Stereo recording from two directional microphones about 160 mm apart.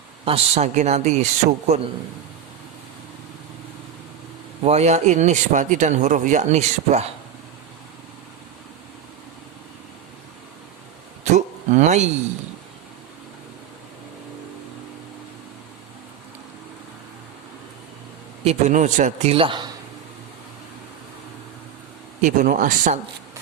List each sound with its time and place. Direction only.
0.3 s speech: 40° right (ahead or behind)
4.6 s speech: 45° right (ahead or behind)
11.2 s a sound: 45° right (ahead or behind)
18.4 s a man's voice: 50° right (ahead or behind); by 19.7 s 30° right (ahead or behind)
22.2 s speech: 55° right (ahead or behind)